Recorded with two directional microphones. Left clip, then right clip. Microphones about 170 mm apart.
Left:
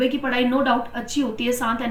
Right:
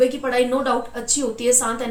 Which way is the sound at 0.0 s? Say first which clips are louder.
Right 3 dB; 25° right (ahead or behind).